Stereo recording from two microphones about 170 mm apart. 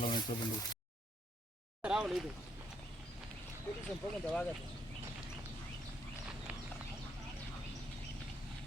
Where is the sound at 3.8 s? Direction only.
5° left (ahead or behind).